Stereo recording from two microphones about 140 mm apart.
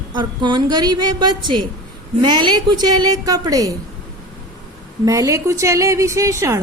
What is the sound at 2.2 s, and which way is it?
A woman's voice, 30° right (ahead or behind).